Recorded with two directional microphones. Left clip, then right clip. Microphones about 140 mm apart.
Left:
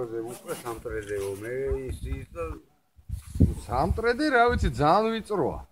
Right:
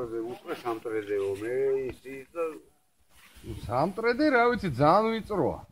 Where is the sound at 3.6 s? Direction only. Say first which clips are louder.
Even; 60° right (ahead or behind).